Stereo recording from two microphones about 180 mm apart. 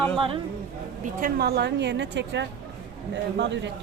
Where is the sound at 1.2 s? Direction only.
55° right (ahead or behind); by 3.7 s 75° right (ahead or behind).